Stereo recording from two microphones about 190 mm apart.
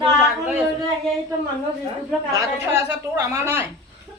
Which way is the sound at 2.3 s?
15° right (ahead or behind).